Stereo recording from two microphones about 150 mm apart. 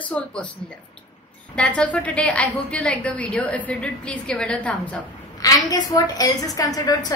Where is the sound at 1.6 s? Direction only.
10° left (ahead or behind).